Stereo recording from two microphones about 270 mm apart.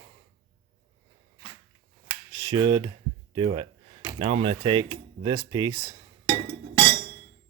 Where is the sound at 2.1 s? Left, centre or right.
Centre.